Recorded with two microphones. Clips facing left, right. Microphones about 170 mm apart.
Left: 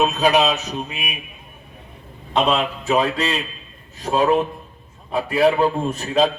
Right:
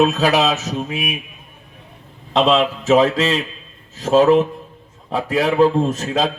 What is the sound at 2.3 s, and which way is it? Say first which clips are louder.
A man's voice: right 4 dB; 90° right.